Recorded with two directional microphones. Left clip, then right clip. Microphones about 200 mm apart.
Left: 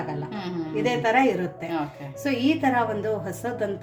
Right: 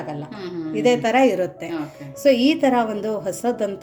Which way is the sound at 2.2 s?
50° right (ahead or behind).